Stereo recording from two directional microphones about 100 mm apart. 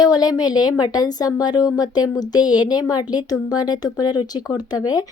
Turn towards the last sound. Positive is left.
turn(degrees=40)  # may be behind; listen again after turning